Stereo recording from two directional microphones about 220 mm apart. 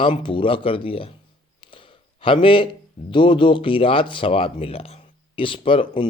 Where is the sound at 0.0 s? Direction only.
20° left (ahead or behind).